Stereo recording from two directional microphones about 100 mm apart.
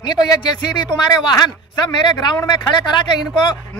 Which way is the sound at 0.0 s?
45° left (ahead or behind).